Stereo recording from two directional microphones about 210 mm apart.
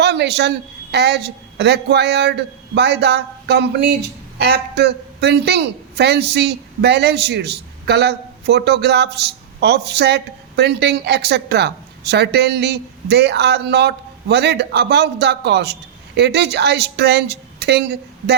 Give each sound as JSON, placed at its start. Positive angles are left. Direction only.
{"t": 0.0, "sound": "a woman's voice", "side_deg": -55}